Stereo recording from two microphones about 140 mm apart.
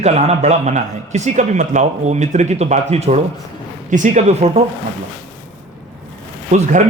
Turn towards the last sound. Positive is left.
turn(degrees=-60)  # may be behind; listen again after turning